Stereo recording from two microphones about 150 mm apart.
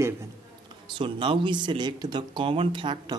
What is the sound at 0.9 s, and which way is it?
Speech, 35° right (ahead or behind).